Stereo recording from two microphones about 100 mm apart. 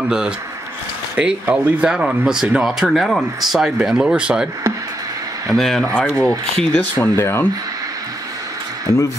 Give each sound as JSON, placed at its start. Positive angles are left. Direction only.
{"t": 1.1, "sound": "speech", "side_deg": -10}
{"t": 5.5, "sound": "speech", "side_deg": 5}
{"t": 8.9, "sound": "speech", "side_deg": 35}